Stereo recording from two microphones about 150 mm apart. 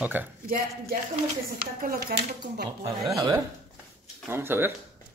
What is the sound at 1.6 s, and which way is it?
Speech, 90° right.